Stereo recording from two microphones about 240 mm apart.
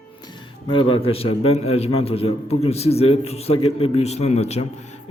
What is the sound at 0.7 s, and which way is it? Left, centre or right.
A man's voice, left.